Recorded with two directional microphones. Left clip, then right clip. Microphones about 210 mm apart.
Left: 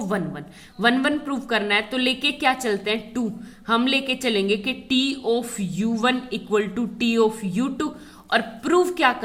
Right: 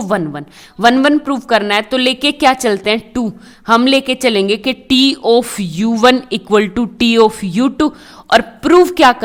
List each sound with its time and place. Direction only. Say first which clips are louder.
0.0 s a woman's voice: right 10 dB; 45° right (ahead or behind)